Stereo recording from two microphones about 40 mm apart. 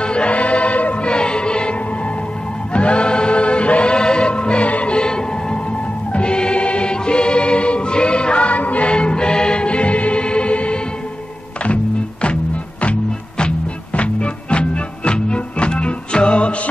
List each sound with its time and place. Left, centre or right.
0.0 s music: left
4.9 s music: left
13.9 s music: left